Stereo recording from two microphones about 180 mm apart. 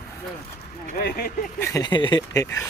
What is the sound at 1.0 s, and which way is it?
Speech, 60° left (ahead or behind).